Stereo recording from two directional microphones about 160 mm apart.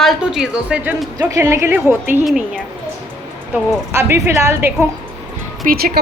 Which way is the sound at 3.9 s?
15° right (ahead or behind).